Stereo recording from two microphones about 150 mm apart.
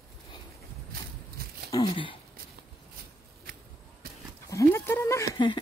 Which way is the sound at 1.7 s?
30° left (ahead or behind).